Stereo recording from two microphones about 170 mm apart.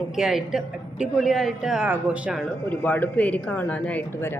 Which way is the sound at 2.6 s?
10° left (ahead or behind).